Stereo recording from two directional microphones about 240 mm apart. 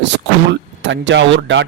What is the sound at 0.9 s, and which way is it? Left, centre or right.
Speech, right.